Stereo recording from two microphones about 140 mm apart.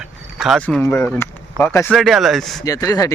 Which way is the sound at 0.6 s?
10° left (ahead or behind).